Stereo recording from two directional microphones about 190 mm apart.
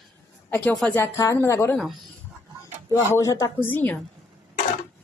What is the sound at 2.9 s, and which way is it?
Speech, 15° left (ahead or behind).